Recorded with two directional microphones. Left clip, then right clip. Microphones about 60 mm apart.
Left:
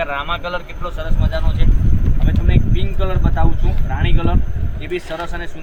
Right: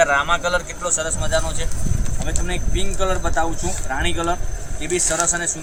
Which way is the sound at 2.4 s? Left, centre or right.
Right.